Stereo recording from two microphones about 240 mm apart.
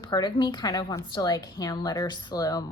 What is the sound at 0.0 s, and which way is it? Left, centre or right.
A woman's voice, centre.